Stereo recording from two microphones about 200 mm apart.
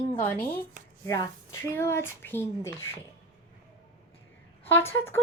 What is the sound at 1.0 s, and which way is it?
Speech, 20° left (ahead or behind).